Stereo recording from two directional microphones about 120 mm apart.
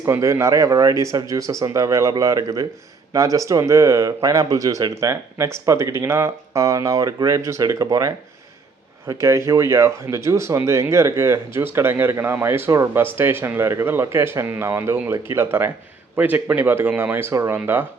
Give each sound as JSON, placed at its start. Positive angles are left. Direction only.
{"t": 0.0, "sound": "speech", "side_deg": -25}